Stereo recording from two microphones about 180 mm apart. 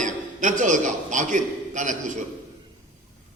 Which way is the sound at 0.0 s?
45° right (ahead or behind).